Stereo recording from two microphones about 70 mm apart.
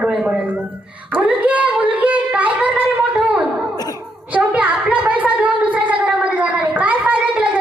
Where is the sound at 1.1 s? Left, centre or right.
Right.